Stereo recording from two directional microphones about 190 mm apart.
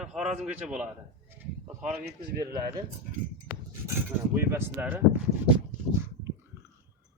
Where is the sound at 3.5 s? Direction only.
60° left (ahead or behind).